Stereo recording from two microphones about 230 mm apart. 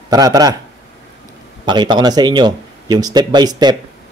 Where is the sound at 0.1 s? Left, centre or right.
Centre.